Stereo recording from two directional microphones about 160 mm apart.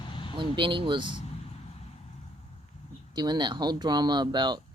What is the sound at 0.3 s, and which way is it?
Speech, 30° right (ahead or behind).